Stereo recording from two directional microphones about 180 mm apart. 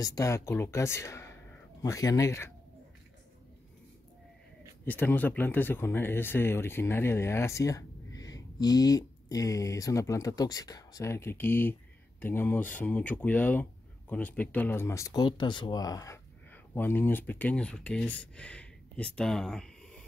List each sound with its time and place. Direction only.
0.0 s speech: 20° left (ahead or behind)
4.8 s speech: 10° left (ahead or behind)